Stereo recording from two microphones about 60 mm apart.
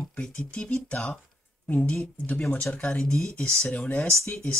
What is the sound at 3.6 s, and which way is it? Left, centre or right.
Speech, left.